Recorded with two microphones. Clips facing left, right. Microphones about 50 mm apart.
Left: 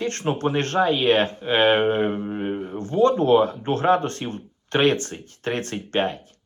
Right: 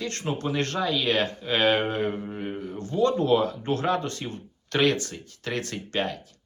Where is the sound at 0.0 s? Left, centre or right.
Left.